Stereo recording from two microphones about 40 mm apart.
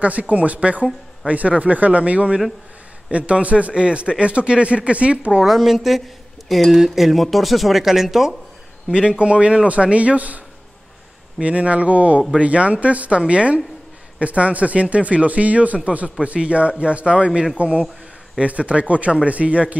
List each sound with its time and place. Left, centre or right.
0.0 s speech: right
5.4 s speech: centre
8.9 s speech: right